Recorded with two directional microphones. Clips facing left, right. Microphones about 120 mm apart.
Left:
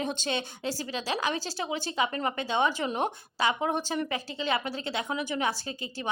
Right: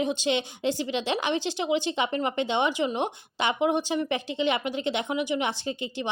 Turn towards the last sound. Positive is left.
turn(degrees=-20)  # may be behind; listen again after turning